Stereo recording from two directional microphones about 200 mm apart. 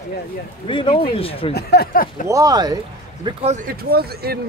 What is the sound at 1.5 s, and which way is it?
Speech, 50° left (ahead or behind).